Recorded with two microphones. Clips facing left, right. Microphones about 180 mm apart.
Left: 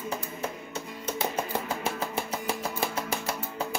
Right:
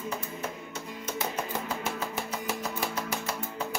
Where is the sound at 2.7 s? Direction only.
30° left (ahead or behind).